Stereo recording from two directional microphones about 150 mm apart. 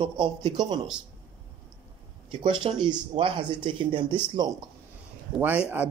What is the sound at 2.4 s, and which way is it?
Speech, 30° right (ahead or behind).